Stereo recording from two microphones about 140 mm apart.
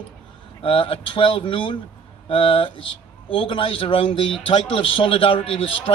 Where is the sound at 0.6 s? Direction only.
40° left (ahead or behind).